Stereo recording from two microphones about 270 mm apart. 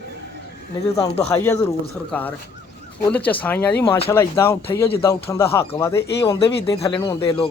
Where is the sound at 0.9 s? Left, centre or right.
Centre.